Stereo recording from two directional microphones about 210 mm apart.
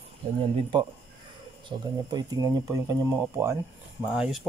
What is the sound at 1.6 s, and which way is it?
Speech, 20° right (ahead or behind).